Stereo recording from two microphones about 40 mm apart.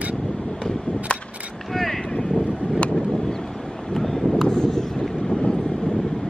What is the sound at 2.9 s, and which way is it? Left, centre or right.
Wind noise, centre.